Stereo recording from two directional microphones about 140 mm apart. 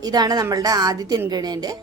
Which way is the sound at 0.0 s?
30° right (ahead or behind).